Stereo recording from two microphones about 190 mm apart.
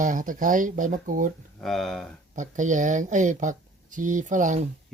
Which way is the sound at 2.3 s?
40° right (ahead or behind).